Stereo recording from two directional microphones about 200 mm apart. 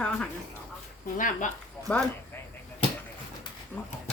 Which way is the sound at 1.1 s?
40° left (ahead or behind).